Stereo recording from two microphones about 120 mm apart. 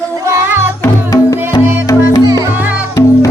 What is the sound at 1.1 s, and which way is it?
Music, 30° left (ahead or behind).